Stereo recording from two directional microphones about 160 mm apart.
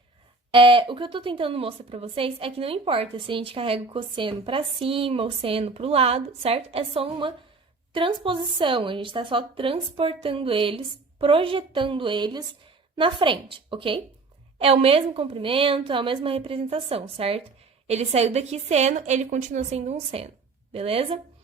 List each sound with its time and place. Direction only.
0.5 s a woman's voice: 30° right (ahead or behind)